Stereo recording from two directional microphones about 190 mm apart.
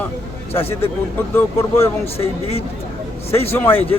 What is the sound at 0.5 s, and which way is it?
Speech, 30° left (ahead or behind).